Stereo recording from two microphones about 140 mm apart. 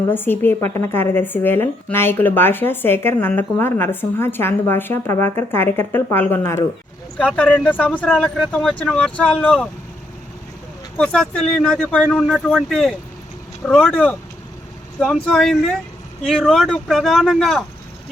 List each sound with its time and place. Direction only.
0.1 s a woman's voice: 15° left (ahead or behind)
8.1 s speech: centre (ahead or behind)
10.9 s speech: 5° left (ahead or behind)